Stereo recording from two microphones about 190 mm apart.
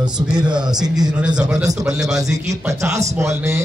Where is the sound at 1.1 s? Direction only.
5° right (ahead or behind).